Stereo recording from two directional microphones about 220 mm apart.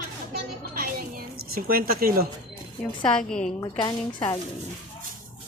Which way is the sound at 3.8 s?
20° left (ahead or behind).